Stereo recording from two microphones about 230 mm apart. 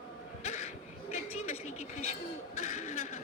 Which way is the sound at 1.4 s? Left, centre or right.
Left.